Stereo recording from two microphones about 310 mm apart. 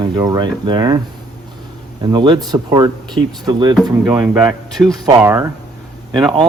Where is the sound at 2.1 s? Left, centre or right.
Centre.